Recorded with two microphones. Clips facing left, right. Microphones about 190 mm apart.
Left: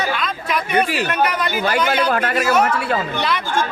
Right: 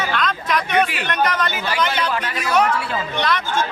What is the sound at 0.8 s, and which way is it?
Speech, 40° left (ahead or behind).